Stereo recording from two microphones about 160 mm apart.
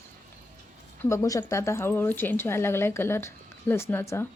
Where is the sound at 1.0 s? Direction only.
20° left (ahead or behind).